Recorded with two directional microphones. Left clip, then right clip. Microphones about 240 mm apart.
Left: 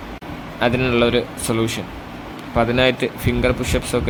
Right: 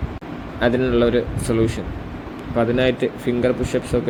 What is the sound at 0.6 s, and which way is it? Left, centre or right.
Speech, centre.